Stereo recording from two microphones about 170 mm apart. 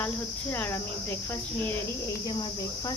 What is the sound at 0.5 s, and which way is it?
Cricket, 10° left (ahead or behind).